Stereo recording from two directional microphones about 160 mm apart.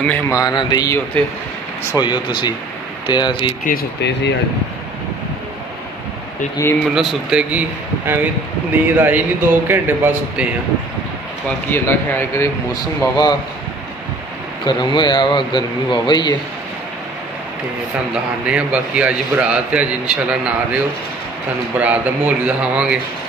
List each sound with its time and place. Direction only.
0.3 s a man's voice: 25° left (ahead or behind)
3.6 s speech: 80° left
6.5 s speech: 15° left (ahead or behind)
6.9 s speech: centre (ahead or behind)
8.9 s a man's voice: 10° right (ahead or behind)
11.7 s speech: 15° left (ahead or behind)
12.7 s a man's voice: 25° left (ahead or behind)
14.7 s a man's voice: 25° left (ahead or behind)
18.1 s a man's voice: 5° right (ahead or behind)